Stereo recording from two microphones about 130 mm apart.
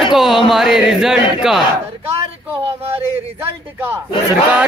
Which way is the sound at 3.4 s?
15° right (ahead or behind).